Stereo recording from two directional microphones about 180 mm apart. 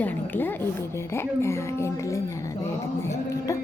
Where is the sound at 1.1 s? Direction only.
15° left (ahead or behind).